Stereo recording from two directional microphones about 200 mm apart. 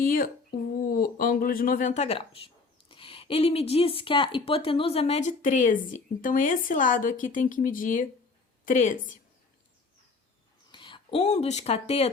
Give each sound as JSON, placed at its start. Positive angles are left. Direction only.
{"t": 0.0, "sound": "speech", "side_deg": 45}
{"t": 10.7, "sound": "speech", "side_deg": 25}